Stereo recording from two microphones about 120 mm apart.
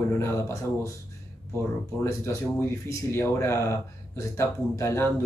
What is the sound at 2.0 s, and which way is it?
Speech, 25° left (ahead or behind).